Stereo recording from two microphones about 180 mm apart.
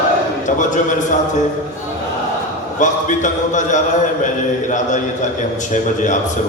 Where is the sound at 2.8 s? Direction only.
45° left (ahead or behind).